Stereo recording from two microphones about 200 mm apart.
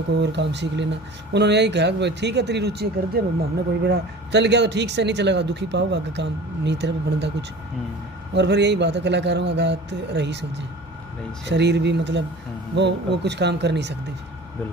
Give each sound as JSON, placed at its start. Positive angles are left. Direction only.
{"t": 0.2, "sound": "speech", "side_deg": -60}
{"t": 8.4, "sound": "speech", "side_deg": -60}